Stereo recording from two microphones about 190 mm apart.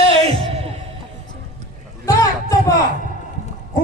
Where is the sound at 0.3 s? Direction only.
30° right (ahead or behind).